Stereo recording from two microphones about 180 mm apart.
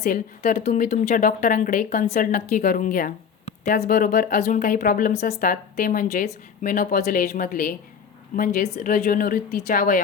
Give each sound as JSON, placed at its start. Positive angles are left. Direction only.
{"t": 0.6, "sound": "a woman's voice", "side_deg": 40}
{"t": 8.7, "sound": "a woman's voice", "side_deg": 40}
{"t": 9.0, "sound": "speech", "side_deg": 55}